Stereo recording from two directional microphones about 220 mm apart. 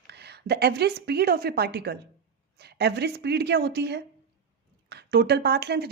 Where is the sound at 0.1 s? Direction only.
50° right (ahead or behind).